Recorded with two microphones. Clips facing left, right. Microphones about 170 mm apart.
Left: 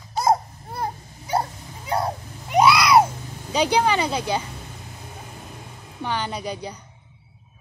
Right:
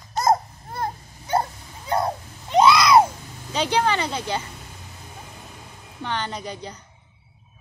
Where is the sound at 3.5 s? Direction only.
10° left (ahead or behind).